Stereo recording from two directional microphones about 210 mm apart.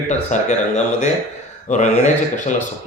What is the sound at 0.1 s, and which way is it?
Speech, 35° left (ahead or behind).